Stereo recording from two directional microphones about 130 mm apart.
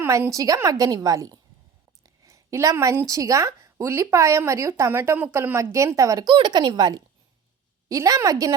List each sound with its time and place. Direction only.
0.0 s speech: 25° right (ahead or behind)